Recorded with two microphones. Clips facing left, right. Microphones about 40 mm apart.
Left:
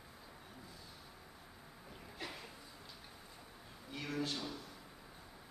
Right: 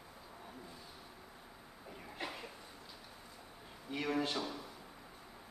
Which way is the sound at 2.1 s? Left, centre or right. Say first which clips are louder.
Right 3 dB; right.